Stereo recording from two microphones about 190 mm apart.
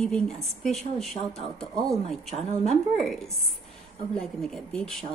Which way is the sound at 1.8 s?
Centre (ahead or behind).